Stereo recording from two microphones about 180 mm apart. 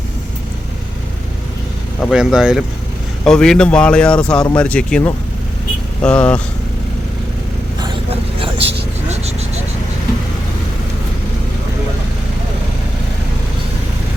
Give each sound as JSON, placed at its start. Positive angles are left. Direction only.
{"t": 2.0, "sound": "speech", "side_deg": 0}
{"t": 7.8, "sound": "vehicle", "side_deg": -30}